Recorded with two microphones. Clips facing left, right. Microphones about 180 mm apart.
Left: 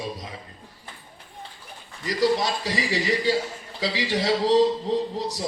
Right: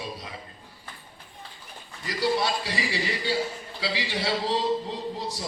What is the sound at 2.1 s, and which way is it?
Speech, 40° left (ahead or behind).